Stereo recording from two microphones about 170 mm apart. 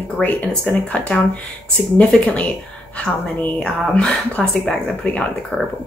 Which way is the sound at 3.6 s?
5° left (ahead or behind).